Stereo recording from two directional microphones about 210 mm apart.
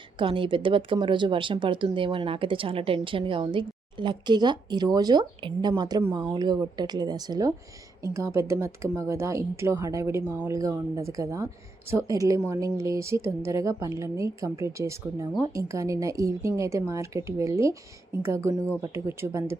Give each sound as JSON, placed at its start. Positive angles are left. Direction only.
{"t": 0.2, "sound": "a woman's voice", "side_deg": -25}